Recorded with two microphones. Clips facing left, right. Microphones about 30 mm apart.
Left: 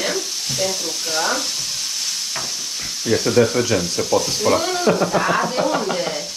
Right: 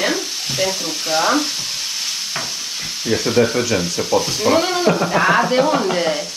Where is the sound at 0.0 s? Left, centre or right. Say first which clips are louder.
Right 3 dB; right.